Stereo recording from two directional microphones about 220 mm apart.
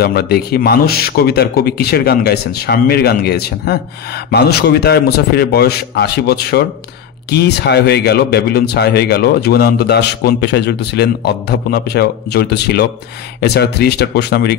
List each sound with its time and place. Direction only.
0.0 s speech: 45° left (ahead or behind)